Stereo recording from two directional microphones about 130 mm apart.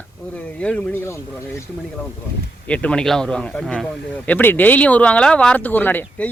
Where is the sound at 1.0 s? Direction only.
20° left (ahead or behind).